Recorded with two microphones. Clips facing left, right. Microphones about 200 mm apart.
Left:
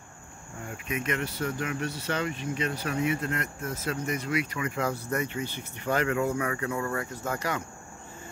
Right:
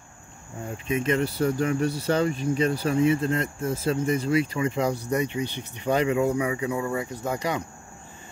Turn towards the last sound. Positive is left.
turn(degrees=-15)  # may be behind; listen again after turning